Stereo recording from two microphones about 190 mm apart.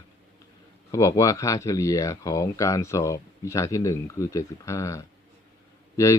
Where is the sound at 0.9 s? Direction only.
20° left (ahead or behind).